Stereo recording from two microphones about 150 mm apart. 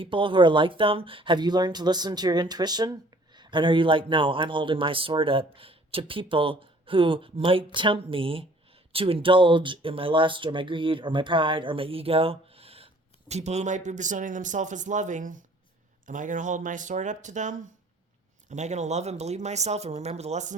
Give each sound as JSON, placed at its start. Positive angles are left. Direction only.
{"t": 0.0, "sound": "speech", "side_deg": -35}